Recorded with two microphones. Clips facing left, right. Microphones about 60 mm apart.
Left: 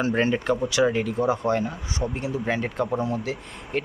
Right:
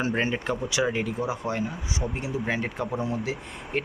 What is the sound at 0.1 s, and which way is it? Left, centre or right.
Speech, centre.